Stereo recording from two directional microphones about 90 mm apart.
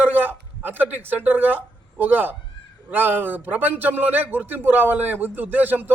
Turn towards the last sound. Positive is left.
turn(degrees=-20)  # may be behind; listen again after turning